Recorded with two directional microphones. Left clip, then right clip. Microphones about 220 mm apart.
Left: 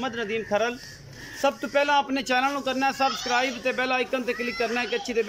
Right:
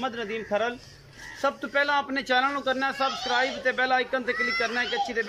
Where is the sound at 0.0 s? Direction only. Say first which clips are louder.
Left 2 dB; centre (ahead or behind).